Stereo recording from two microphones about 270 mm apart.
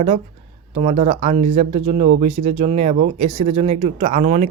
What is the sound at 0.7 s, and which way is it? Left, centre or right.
Speech, right.